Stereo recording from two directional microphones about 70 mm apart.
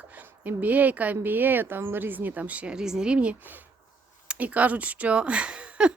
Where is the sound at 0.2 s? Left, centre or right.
Right.